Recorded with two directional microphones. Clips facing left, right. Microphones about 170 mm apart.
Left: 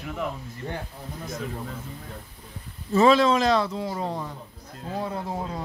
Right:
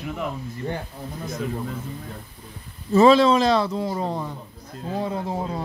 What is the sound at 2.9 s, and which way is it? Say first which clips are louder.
Speech: right 4 dB; 30° right (ahead or behind).